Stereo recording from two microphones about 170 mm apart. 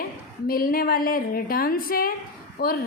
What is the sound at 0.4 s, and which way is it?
A woman's voice, 60° left (ahead or behind).